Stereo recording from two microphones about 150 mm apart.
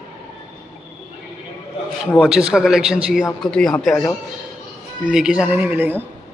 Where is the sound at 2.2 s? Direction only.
5° right (ahead or behind).